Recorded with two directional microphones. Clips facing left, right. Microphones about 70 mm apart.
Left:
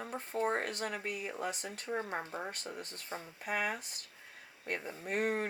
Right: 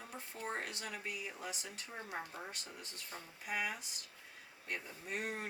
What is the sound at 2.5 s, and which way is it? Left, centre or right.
Speech, left.